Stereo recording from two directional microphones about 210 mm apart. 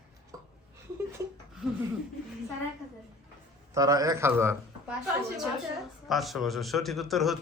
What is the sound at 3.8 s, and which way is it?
A man's voice, 15° right (ahead or behind).